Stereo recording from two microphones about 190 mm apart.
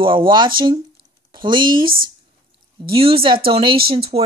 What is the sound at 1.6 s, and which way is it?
Speech, 50° right (ahead or behind).